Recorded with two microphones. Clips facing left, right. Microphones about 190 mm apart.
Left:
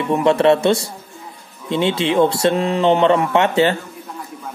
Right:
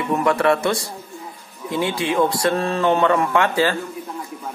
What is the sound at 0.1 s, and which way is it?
Speech, 25° left (ahead or behind).